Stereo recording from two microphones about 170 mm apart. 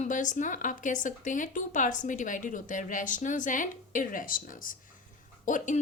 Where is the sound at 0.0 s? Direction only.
50° left (ahead or behind).